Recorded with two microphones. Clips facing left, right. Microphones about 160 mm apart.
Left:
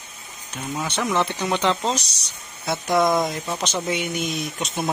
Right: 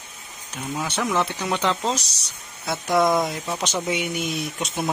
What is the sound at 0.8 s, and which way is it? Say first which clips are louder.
Speech: left 1 dB; 5° right (ahead or behind).